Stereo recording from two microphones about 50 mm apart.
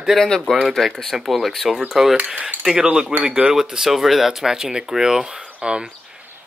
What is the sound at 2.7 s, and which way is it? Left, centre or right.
Speech, centre.